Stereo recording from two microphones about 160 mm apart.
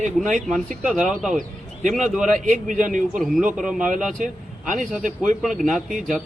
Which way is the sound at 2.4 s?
55° right (ahead or behind).